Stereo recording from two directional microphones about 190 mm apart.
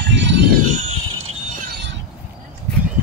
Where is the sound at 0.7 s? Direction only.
35° right (ahead or behind).